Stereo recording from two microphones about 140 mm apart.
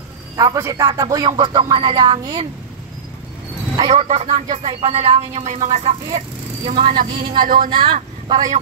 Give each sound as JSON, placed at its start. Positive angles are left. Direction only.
{"t": 0.4, "sound": "speech", "side_deg": -25}
{"t": 3.7, "sound": "speech", "side_deg": -45}
{"t": 7.0, "sound": "speech", "side_deg": -90}
{"t": 7.7, "sound": "speech", "side_deg": -35}